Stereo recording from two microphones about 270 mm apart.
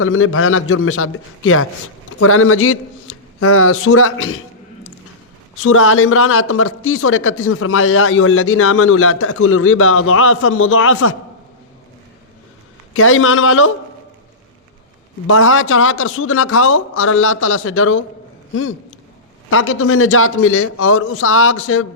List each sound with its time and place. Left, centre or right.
0.0 s a man's voice: left
12.9 s speech: left
15.3 s speech: left
19.5 s speech: left